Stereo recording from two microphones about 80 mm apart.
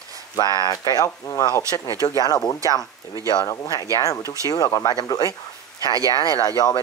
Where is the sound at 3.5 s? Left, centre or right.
Left.